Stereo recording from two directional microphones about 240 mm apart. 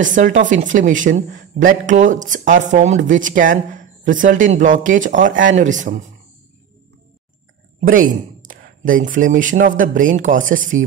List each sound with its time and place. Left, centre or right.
0.0 s speech: right
7.8 s speech: right